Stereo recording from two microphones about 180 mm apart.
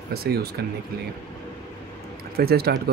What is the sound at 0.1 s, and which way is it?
Speech, 60° right (ahead or behind).